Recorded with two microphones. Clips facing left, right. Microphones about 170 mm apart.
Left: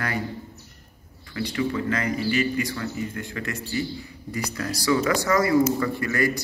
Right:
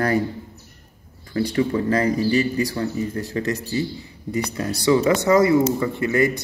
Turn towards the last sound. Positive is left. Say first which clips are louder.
# right 4 dB
turn(degrees=-25)  # may be behind; listen again after turning